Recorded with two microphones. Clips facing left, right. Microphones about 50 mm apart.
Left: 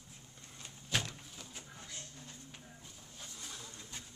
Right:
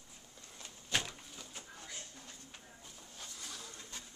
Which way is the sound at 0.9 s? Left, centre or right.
Centre.